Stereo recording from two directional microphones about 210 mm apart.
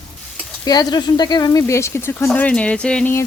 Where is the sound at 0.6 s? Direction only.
20° left (ahead or behind).